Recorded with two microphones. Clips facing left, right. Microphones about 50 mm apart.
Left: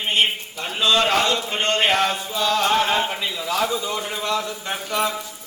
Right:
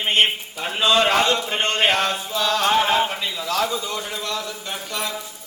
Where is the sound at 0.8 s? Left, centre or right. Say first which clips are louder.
Right 1 dB; right.